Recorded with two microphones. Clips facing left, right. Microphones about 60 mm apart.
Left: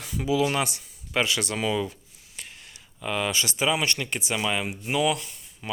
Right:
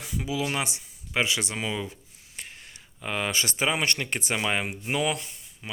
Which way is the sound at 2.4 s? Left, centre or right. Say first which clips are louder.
Right 1 dB; right.